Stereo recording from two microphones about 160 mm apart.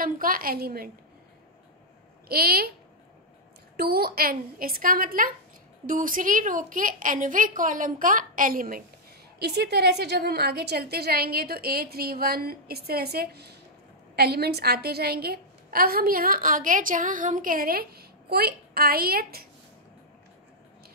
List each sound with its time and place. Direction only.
0.0 s a woman's voice: 60° right (ahead or behind)
2.2 s a woman's voice: 70° right (ahead or behind)
3.7 s a woman's voice: 75° right (ahead or behind)
9.4 s a woman's voice: 90° right; by 19.4 s 70° right (ahead or behind)